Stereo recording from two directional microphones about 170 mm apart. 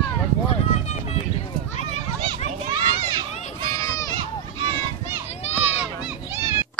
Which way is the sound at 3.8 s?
20° left (ahead or behind).